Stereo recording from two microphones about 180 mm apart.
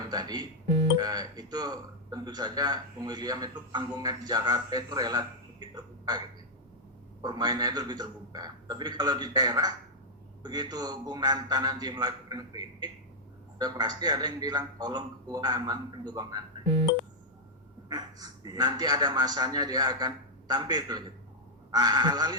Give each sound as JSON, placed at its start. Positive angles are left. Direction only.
{"t": 0.1, "sound": "speech", "side_deg": -20}
{"t": 17.8, "sound": "speech", "side_deg": -20}